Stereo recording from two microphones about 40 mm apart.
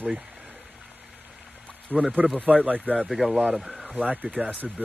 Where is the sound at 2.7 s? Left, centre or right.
Right.